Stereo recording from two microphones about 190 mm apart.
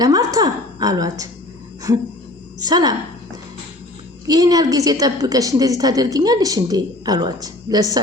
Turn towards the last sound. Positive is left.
turn(degrees=-20)  # may be behind; listen again after turning